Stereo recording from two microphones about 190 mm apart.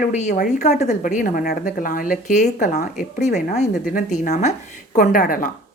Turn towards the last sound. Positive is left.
turn(degrees=50)  # may be behind; listen again after turning